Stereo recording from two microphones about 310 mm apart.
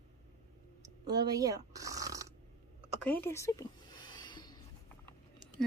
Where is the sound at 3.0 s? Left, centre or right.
Centre.